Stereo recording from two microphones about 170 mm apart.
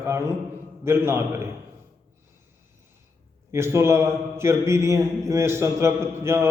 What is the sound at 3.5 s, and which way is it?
A man's voice, 15° right (ahead or behind).